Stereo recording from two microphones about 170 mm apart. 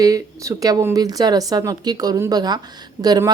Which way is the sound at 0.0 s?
20° right (ahead or behind).